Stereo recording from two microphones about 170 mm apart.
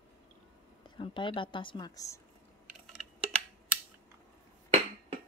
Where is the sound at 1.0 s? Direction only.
30° left (ahead or behind).